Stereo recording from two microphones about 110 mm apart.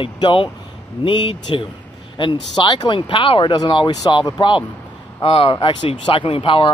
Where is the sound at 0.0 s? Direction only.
50° left (ahead or behind).